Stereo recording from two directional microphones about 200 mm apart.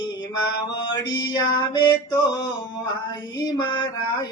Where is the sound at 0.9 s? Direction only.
20° left (ahead or behind).